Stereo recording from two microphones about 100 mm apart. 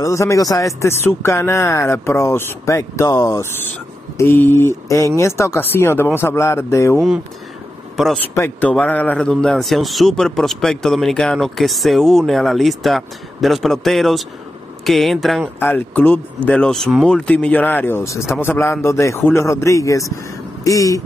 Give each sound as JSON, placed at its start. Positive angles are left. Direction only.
{"t": 0.0, "sound": "speech", "side_deg": 30}
{"t": 8.5, "sound": "a man's voice", "side_deg": 15}
{"t": 15.6, "sound": "a man's voice", "side_deg": 15}